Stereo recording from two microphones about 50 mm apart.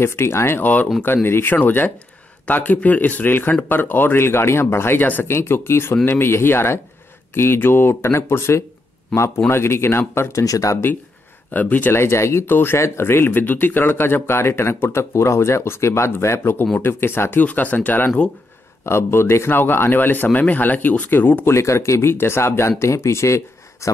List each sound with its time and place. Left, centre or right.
0.0 s speech: left
0.6 s speech: left
1.0 s speech: left
11.5 s speech: left
11.9 s speech: left
12.4 s speech: left
12.7 s speech: left
17.4 s speech: left
18.9 s speech: left
19.6 s speech: left
21.5 s speech: left
22.1 s speech: left